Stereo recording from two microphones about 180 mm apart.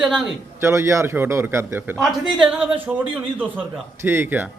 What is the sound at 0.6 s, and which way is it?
A man's voice, 15° right (ahead or behind).